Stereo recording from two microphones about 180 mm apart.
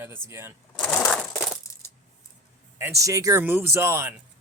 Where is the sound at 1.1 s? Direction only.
5° left (ahead or behind).